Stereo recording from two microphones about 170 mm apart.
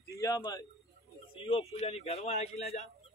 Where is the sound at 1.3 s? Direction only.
35° left (ahead or behind).